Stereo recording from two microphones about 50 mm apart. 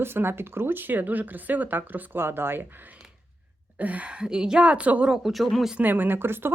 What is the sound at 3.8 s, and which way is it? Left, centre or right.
A woman's voice, right.